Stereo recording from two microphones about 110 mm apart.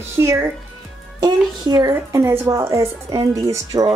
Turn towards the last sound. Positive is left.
turn(degrees=-30)  # may be behind; listen again after turning